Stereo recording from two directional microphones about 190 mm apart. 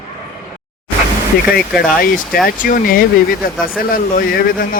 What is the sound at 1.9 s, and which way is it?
A man's voice, 50° left (ahead or behind).